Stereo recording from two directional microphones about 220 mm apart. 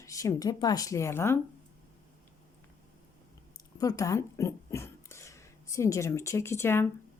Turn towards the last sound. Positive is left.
turn(degrees=10)  # may be behind; listen again after turning